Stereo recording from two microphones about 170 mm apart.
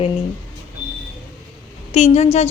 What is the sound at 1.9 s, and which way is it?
Speech, 40° left (ahead or behind).